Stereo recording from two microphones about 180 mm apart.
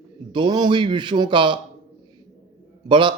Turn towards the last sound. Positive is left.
turn(degrees=-25)  # may be behind; listen again after turning